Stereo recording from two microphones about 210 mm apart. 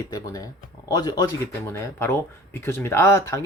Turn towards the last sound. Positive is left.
turn(degrees=15)  # may be behind; listen again after turning